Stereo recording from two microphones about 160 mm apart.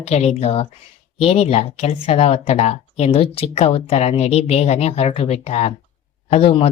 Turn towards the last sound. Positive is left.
turn(degrees=40)  # may be behind; listen again after turning